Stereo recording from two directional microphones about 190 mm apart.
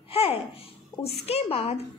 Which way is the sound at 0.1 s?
30° left (ahead or behind).